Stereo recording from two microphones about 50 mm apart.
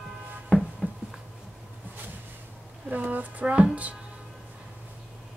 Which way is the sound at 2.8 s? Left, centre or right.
Right.